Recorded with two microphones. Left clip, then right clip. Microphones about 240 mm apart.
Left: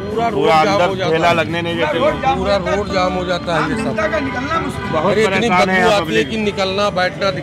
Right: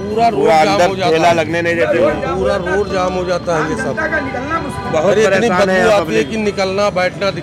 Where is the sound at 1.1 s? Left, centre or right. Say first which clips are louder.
Right 2 dB; centre.